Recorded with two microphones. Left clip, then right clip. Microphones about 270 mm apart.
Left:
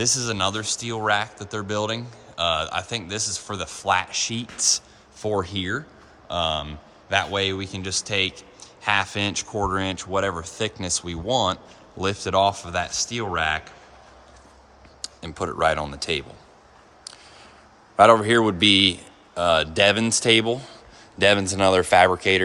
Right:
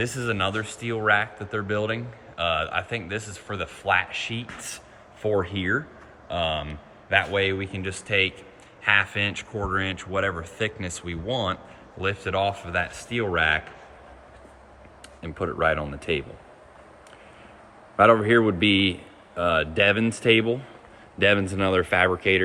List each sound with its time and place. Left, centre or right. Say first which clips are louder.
0.0 s a man's voice: left 3 dB; centre
15.0 s speech: left 1 dB; centre
17.9 s speech: left 2 dB; centre